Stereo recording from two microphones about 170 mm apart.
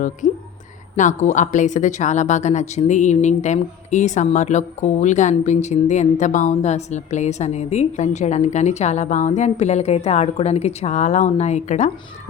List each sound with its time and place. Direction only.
0.2 s a woman's voice: 90° left
0.9 s a woman's voice: 45° left (ahead or behind)